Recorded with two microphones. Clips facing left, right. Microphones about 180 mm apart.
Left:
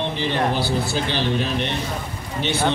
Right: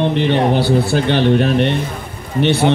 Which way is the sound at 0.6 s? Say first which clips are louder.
Right 8 dB; 65° right (ahead or behind).